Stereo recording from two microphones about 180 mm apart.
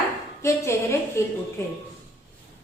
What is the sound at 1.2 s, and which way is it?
Speech, 15° left (ahead or behind).